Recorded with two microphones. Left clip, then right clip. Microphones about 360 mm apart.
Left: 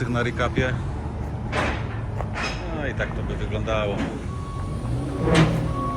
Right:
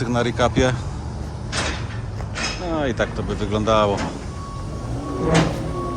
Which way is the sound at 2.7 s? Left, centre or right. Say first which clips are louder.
Right 6 dB; centre.